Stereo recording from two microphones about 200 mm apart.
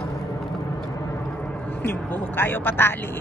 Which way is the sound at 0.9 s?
15° left (ahead or behind).